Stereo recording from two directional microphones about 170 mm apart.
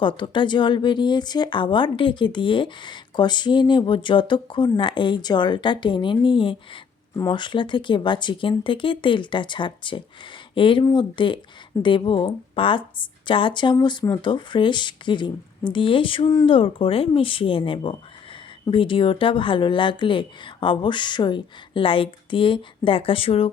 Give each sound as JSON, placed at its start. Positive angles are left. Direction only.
{"t": 0.0, "sound": "speech", "side_deg": 25}